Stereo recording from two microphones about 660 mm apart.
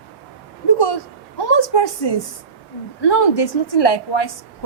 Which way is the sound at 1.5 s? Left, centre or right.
Left.